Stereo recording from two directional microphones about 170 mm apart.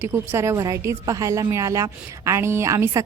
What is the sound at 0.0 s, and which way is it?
A woman's voice, 15° right (ahead or behind).